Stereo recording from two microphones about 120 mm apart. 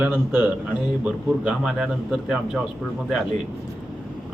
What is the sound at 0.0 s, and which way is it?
A man's voice, 15° right (ahead or behind).